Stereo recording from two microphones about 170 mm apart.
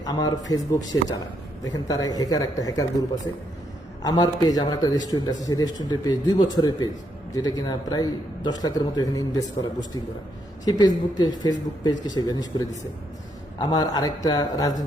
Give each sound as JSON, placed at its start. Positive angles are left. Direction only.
{"t": 0.0, "sound": "a man's voice", "side_deg": 25}
{"t": 4.0, "sound": "a man's voice", "side_deg": 25}